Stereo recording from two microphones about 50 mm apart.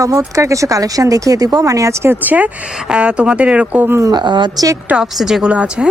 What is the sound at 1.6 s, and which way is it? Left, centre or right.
Speech, right.